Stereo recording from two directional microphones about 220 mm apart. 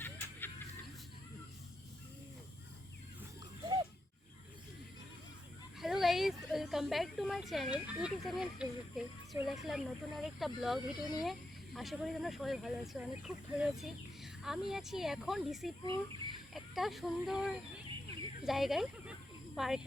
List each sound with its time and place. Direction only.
0.0 s music: 10° left (ahead or behind)
5.8 s speech: centre (ahead or behind)
15.9 s bird: 20° right (ahead or behind)
16.6 s speech: centre (ahead or behind)